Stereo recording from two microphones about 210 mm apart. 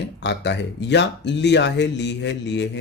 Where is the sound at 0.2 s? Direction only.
55° left (ahead or behind).